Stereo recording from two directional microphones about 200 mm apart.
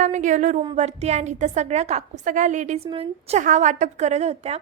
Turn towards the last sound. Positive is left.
turn(degrees=-30)  # may be behind; listen again after turning